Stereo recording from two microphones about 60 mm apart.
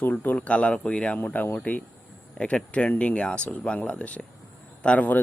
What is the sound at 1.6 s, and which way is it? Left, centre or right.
Speech, left.